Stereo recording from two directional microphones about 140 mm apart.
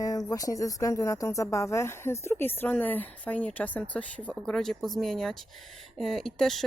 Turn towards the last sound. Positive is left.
turn(degrees=0)  # may be behind; listen again after turning